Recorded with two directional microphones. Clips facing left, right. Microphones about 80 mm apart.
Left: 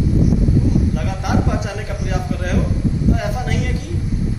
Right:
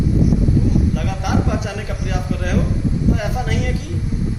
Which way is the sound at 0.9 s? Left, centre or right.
Centre.